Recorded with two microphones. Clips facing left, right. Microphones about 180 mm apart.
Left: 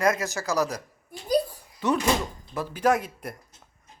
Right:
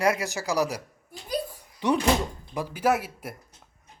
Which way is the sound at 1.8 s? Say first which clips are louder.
Right 1 dB; 15° right (ahead or behind).